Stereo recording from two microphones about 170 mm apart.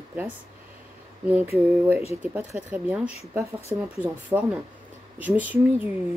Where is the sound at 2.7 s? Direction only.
10° right (ahead or behind).